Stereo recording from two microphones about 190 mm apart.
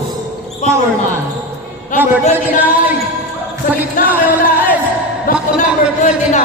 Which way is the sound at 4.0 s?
45° left (ahead or behind).